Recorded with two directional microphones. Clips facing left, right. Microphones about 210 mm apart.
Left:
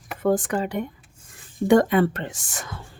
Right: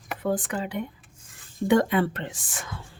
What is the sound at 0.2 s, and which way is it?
A woman's voice, 45° left (ahead or behind).